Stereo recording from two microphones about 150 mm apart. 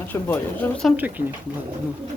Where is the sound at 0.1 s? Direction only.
15° left (ahead or behind).